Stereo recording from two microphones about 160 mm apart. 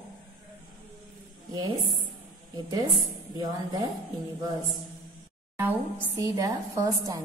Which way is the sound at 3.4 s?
25° right (ahead or behind).